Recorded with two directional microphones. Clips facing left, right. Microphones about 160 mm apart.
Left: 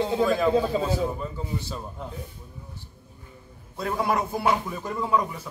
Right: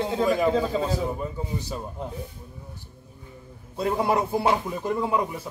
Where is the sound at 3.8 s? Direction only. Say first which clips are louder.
Right 2 dB; 25° right (ahead or behind).